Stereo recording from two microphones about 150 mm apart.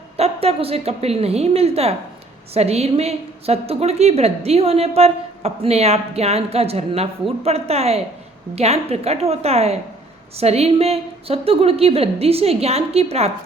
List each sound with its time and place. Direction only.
0.2 s a woman's voice: 40° right (ahead or behind)